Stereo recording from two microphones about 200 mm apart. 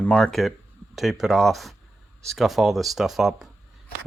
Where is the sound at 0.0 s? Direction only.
5° left (ahead or behind).